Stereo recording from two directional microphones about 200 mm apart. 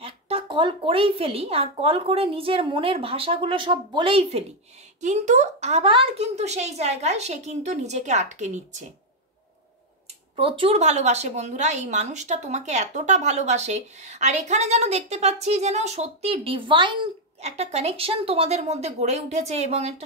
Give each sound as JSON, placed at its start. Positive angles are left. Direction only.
{"t": 0.0, "sound": "a woman's voice", "side_deg": -30}
{"t": 10.3, "sound": "a woman's voice", "side_deg": -25}